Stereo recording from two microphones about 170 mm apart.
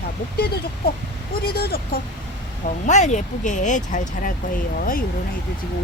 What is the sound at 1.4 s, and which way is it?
Speech, 65° left (ahead or behind).